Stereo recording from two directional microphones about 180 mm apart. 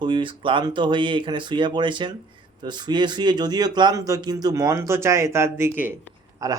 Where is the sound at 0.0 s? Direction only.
25° right (ahead or behind).